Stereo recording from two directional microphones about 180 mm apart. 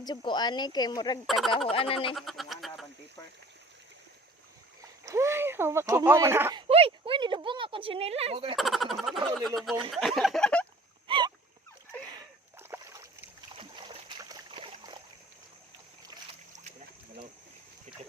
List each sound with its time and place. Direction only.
0.0 s speech: 25° left (ahead or behind)
1.3 s a sound: centre (ahead or behind)
1.7 s speech: 30° left (ahead or behind)
2.1 s frog: centre (ahead or behind)
5.0 s speech: 15° right (ahead or behind)
6.6 s speech: 30° right (ahead or behind)
8.5 s a sound: centre (ahead or behind)
11.1 s a sound: 30° right (ahead or behind)
12.1 s boat: 15° right (ahead or behind)
13.6 s splash: 30° right (ahead or behind)